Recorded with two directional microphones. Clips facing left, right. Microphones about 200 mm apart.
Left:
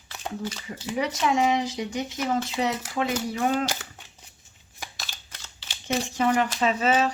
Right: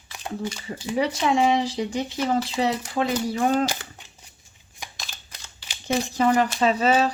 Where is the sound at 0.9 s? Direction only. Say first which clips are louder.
Right 3 dB; 30° right (ahead or behind).